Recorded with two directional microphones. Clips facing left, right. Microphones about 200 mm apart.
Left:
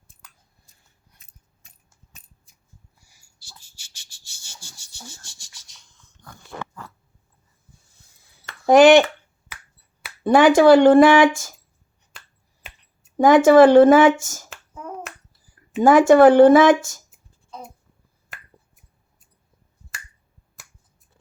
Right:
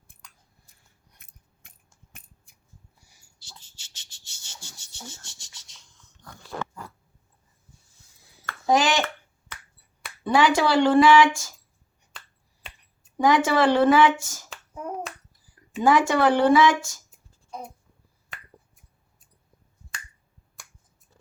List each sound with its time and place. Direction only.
0.7 s scissors: 55° right (ahead or behind)
1.2 s a sound: 55° right (ahead or behind)
3.6 s a sound: 25° right (ahead or behind)
3.9 s insect: 20° right (ahead or behind)
8.6 s speech: 60° left (ahead or behind)
10.2 s speech: 50° left (ahead or behind)
13.1 s speech: 50° left (ahead or behind)
15.8 s speech: 50° left (ahead or behind)